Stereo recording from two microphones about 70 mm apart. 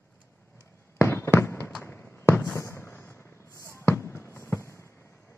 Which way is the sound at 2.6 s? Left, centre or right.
Left.